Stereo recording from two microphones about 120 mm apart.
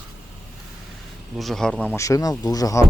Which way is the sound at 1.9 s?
25° left (ahead or behind).